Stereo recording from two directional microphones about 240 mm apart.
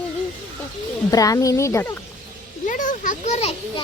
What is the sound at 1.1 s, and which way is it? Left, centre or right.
Speech, centre.